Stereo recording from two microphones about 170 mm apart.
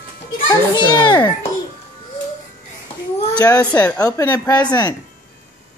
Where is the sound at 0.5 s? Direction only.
25° left (ahead or behind).